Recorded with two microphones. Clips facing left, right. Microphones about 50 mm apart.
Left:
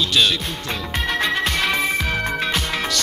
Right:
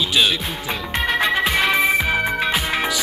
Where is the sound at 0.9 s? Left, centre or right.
Centre.